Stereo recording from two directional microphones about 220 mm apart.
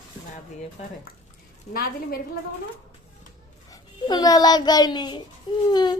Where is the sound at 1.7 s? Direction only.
40° left (ahead or behind).